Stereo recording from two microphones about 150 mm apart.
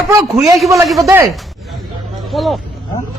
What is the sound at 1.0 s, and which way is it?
Speech, 20° right (ahead or behind).